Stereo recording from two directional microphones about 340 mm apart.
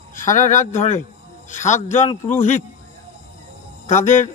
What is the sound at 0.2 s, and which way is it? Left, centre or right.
A man's voice, left.